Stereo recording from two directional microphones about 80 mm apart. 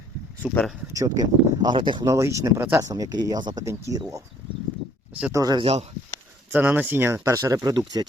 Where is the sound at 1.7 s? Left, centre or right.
Right.